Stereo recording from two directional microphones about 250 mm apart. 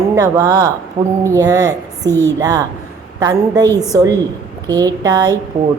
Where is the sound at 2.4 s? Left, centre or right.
Centre.